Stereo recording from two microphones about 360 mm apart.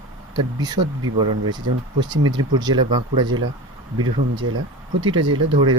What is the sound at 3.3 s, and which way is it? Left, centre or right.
Speech, right.